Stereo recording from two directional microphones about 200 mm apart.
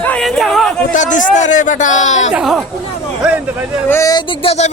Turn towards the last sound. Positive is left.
turn(degrees=30)  # may be behind; listen again after turning